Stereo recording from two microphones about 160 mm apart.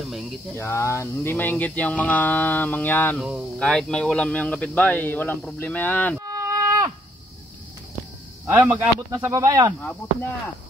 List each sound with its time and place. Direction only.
0.6 s speech: 15° left (ahead or behind)
3.2 s speech: 5° right (ahead or behind)
6.1 s music: 20° right (ahead or behind)
8.5 s speech: 15° right (ahead or behind)
9.8 s speech: 10° left (ahead or behind)